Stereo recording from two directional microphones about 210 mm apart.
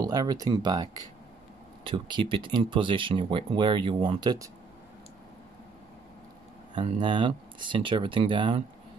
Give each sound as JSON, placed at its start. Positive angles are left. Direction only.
{"t": 0.0, "sound": "speech", "side_deg": -15}
{"t": 1.9, "sound": "speech", "side_deg": -25}
{"t": 6.7, "sound": "speech", "side_deg": -25}